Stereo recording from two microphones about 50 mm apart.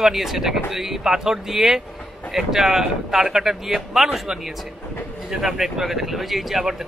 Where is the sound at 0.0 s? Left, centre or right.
Centre.